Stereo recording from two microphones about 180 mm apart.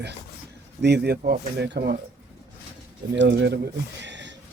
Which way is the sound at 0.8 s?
70° right (ahead or behind).